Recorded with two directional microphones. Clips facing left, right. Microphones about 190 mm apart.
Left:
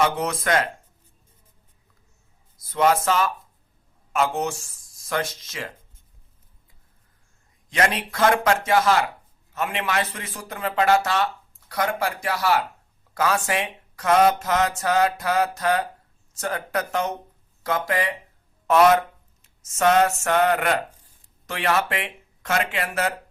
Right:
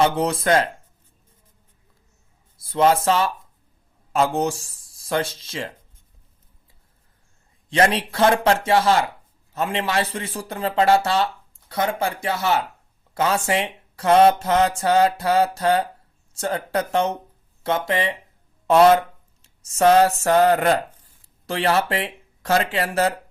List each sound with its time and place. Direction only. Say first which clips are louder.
0.0 s a man's voice: right 3 dB; 30° right (ahead or behind)
2.6 s a man's voice: right 2 dB; 30° right (ahead or behind)
7.7 s a man's voice: right 4 dB; 30° right (ahead or behind)